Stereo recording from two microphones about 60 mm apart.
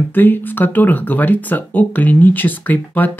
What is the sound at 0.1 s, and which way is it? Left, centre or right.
Speech, left.